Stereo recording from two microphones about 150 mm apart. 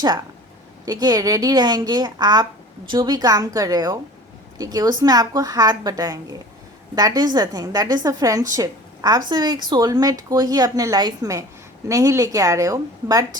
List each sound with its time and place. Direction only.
0.9 s a woman's voice: 25° right (ahead or behind)